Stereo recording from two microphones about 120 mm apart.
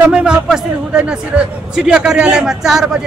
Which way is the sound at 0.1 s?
5° right (ahead or behind).